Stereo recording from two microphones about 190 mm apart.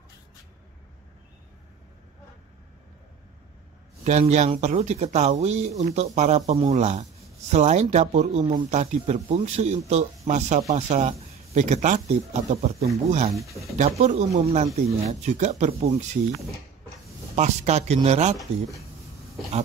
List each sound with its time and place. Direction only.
4.0 s speech: 35° right (ahead or behind)
17.4 s speech: 35° right (ahead or behind)